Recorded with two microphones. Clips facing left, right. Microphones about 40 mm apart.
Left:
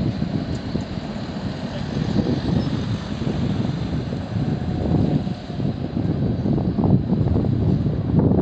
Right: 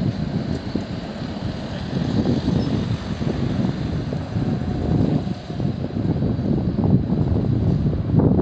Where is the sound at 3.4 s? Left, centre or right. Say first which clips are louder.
Right 1 dB; centre.